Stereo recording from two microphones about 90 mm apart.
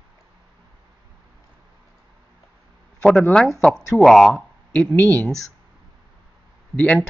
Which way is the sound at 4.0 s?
Centre (ahead or behind).